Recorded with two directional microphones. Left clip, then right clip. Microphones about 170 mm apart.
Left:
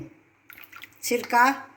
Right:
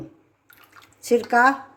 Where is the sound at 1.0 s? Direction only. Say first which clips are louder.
Right 3 dB; 45° right (ahead or behind).